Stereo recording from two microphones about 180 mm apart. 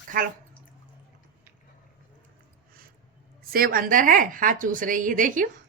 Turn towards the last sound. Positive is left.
turn(degrees=-50)  # may be behind; listen again after turning